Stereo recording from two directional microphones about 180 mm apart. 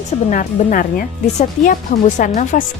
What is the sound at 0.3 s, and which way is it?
Speech, 50° left (ahead or behind).